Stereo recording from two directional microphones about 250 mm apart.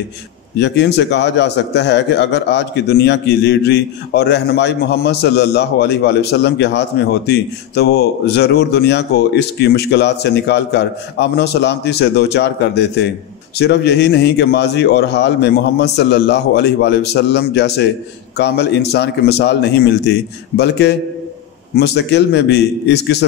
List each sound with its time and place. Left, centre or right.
0.6 s a man's voice: left